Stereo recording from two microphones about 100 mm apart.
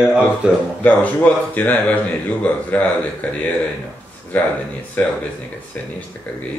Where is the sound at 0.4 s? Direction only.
10° right (ahead or behind).